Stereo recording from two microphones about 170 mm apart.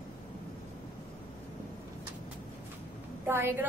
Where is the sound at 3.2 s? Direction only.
15° right (ahead or behind).